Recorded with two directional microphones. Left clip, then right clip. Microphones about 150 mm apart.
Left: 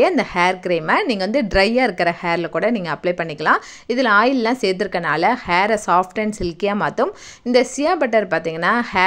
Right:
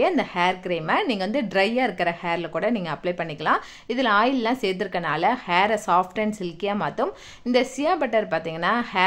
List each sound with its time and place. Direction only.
0.0 s a woman's voice: 35° left (ahead or behind)